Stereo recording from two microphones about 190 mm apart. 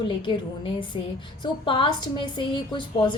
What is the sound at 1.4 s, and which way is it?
A woman's voice, 25° left (ahead or behind).